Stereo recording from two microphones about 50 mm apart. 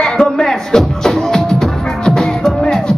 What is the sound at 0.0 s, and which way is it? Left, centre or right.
Music, centre.